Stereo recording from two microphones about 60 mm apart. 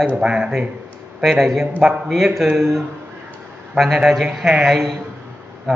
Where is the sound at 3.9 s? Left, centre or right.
Centre.